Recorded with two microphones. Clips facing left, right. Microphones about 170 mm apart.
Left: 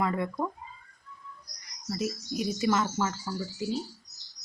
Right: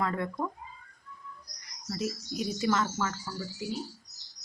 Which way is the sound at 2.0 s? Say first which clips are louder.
Left 2 dB; 10° left (ahead or behind).